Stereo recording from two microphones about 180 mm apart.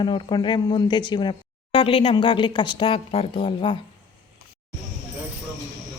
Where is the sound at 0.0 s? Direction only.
25° left (ahead or behind).